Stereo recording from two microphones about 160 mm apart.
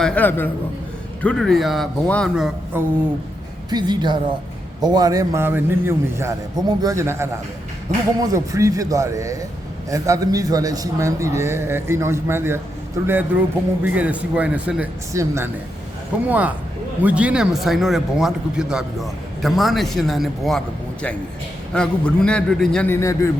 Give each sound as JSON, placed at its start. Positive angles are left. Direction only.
{"t": 0.0, "sound": "a man's voice", "side_deg": 10}
{"t": 2.3, "sound": "a man's voice", "side_deg": -5}
{"t": 3.7, "sound": "a man's voice", "side_deg": -25}
{"t": 15.1, "sound": "a man's voice", "side_deg": -20}
{"t": 21.7, "sound": "speech", "side_deg": 5}
{"t": 22.9, "sound": "a man's voice", "side_deg": 20}